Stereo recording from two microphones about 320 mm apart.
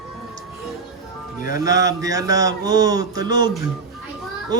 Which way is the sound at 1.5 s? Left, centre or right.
Centre.